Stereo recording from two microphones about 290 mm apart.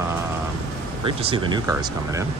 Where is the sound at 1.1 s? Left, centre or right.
Centre.